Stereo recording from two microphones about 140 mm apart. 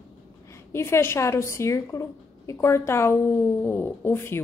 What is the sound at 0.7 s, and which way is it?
A woman's voice, 20° left (ahead or behind).